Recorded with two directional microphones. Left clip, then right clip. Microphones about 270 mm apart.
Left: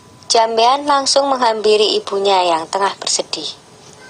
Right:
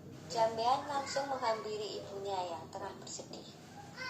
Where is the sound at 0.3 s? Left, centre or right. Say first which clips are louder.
Left 19 dB; left.